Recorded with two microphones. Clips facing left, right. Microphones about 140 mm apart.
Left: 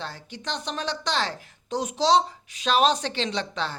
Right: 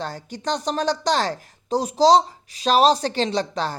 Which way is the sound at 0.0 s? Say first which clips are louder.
Right 7 dB; 40° right (ahead or behind).